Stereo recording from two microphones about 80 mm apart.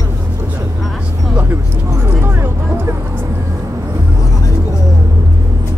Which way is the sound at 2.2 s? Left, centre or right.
Right.